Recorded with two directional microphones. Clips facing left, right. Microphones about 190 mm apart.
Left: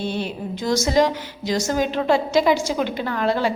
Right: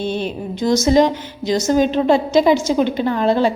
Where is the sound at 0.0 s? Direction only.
20° right (ahead or behind).